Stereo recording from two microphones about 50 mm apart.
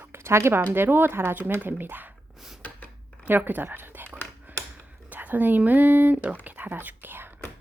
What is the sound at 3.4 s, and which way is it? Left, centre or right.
Speech, right.